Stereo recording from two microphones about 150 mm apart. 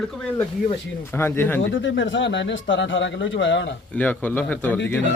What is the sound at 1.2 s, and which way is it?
Speech, 15° left (ahead or behind).